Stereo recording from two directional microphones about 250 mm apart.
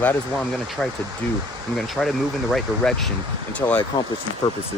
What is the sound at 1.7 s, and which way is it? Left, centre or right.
Speech, centre.